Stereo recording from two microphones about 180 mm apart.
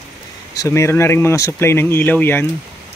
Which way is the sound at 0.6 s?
15° left (ahead or behind).